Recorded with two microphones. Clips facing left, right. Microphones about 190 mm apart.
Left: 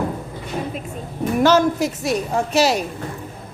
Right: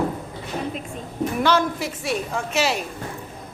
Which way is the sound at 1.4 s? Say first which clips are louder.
Left 6 dB; 45° left (ahead or behind).